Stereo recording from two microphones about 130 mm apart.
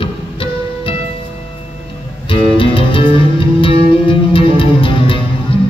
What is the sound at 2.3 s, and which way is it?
Music, 40° left (ahead or behind).